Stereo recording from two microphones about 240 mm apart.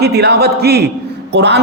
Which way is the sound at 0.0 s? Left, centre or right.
Right.